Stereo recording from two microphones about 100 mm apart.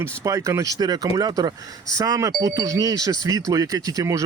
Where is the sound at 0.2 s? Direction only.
30° right (ahead or behind).